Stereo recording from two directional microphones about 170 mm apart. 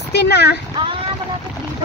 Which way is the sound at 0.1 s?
75° left (ahead or behind).